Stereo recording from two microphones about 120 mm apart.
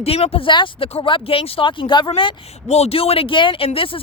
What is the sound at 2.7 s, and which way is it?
Speech, 60° left (ahead or behind).